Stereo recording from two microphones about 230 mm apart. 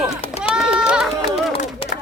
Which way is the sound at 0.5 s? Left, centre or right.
Centre.